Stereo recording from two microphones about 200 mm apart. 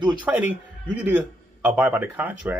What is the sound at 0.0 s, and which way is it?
A man's voice, 5° right (ahead or behind).